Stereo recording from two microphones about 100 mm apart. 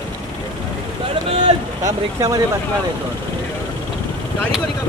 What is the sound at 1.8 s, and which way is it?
Speech, 35° right (ahead or behind).